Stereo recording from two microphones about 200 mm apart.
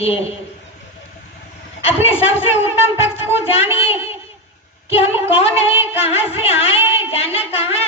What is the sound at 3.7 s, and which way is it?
Music, 30° left (ahead or behind).